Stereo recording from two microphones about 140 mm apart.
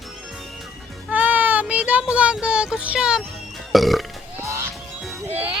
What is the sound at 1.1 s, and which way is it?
Child singing, 10° right (ahead or behind).